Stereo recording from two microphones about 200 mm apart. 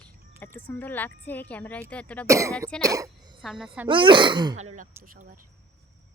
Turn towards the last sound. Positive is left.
turn(degrees=-45)  # may be behind; listen again after turning